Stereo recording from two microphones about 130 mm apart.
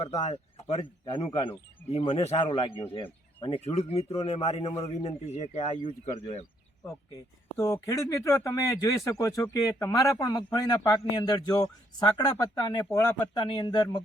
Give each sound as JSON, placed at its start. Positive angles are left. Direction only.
{"t": 0.0, "sound": "speech", "side_deg": 55}
{"t": 0.8, "sound": "speech", "side_deg": 40}
{"t": 1.9, "sound": "speech", "side_deg": 50}
{"t": 3.6, "sound": "speech", "side_deg": 55}
{"t": 7.5, "sound": "speech", "side_deg": 20}
{"t": 13.3, "sound": "speech", "side_deg": 40}